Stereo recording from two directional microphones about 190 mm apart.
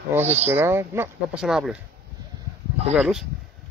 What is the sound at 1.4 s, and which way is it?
Speech, centre (ahead or behind).